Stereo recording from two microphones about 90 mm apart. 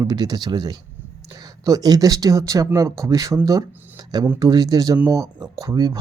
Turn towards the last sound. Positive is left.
turn(degrees=-45)  # may be behind; listen again after turning